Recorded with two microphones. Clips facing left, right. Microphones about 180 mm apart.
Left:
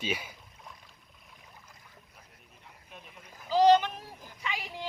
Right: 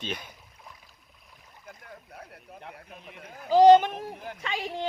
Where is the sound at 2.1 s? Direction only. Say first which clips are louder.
Right 12 dB; 70° right (ahead or behind).